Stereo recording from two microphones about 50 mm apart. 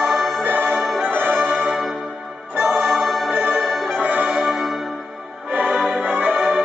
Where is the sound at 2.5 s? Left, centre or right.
Right.